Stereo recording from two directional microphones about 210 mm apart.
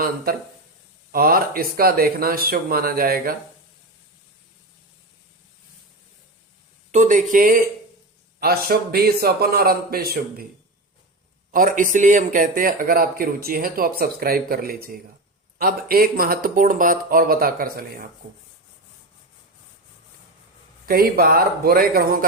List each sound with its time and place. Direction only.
0.3 s speech: 45° right (ahead or behind)
6.9 s speech: 35° right (ahead or behind)
11.5 s speech: 40° right (ahead or behind)
20.8 s speech: 45° right (ahead or behind)